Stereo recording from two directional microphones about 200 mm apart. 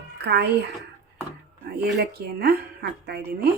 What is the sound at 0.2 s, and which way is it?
Speech, 55° right (ahead or behind).